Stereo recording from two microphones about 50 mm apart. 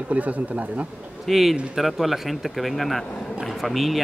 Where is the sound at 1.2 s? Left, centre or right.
Centre.